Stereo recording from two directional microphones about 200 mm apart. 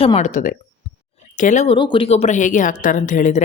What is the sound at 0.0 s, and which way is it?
Speech, 30° left (ahead or behind).